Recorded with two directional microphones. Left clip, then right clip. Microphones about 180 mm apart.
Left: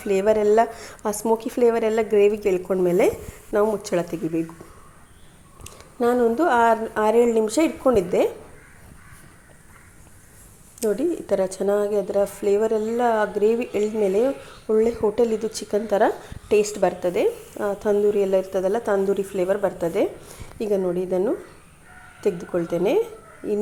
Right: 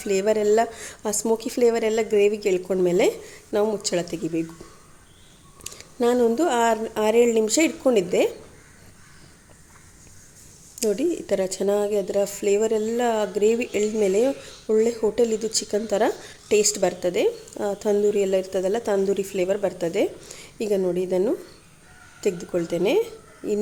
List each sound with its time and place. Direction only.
0.0 s speech: 5° right (ahead or behind)
5.6 s speech: 10° right (ahead or behind)
10.8 s a woman's voice: 10° right (ahead or behind)